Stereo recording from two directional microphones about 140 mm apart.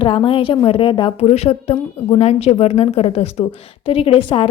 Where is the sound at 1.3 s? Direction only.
50° left (ahead or behind).